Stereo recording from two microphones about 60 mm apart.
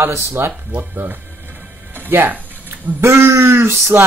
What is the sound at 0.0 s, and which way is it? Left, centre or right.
Music, right.